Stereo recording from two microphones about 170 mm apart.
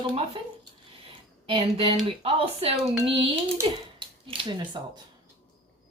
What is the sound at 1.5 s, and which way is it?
Speech, 35° right (ahead or behind).